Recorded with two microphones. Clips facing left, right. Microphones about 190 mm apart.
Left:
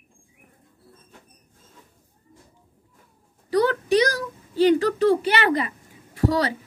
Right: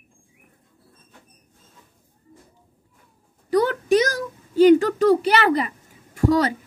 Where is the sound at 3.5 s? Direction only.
45° right (ahead or behind).